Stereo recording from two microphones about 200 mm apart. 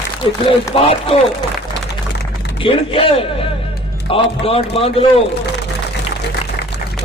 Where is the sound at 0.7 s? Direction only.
30° left (ahead or behind).